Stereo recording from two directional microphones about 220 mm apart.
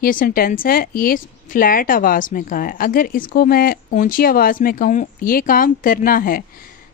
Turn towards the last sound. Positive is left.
turn(degrees=40)  # may be behind; listen again after turning